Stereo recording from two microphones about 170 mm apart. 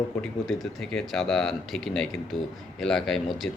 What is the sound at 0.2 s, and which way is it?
Speech, centre (ahead or behind).